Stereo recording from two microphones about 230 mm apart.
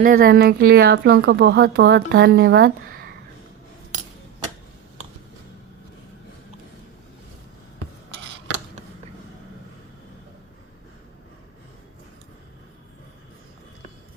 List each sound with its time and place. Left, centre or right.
0.0 s speech: right